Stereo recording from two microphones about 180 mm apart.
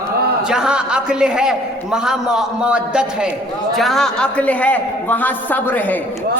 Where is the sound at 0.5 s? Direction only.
5° right (ahead or behind).